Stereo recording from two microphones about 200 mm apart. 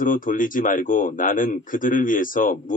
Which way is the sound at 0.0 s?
40° left (ahead or behind).